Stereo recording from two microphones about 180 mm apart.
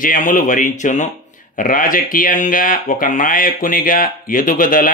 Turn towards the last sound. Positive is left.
turn(degrees=50)  # may be behind; listen again after turning